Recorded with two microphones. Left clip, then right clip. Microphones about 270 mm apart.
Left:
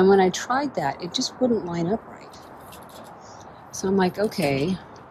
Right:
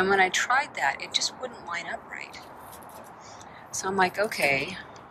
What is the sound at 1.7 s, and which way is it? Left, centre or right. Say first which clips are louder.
Speech: left 6 dB; left.